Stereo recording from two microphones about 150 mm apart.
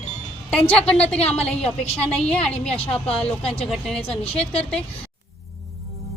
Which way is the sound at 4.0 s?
40° left (ahead or behind).